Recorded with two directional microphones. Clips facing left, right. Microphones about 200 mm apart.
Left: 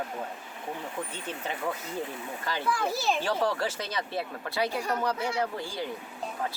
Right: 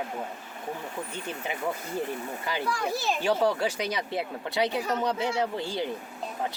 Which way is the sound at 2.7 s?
Centre (ahead or behind).